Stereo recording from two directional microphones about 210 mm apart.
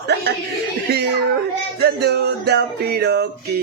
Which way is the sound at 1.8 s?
50° right (ahead or behind).